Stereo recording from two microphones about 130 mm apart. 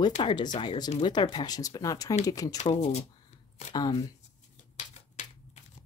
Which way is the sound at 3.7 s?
30° left (ahead or behind).